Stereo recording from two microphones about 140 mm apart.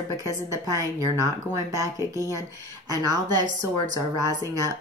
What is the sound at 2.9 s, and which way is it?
A woman's voice, 25° right (ahead or behind).